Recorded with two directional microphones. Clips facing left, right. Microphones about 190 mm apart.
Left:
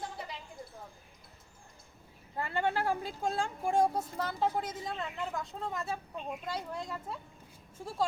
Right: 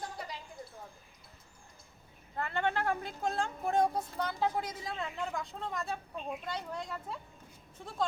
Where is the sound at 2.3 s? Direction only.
10° left (ahead or behind).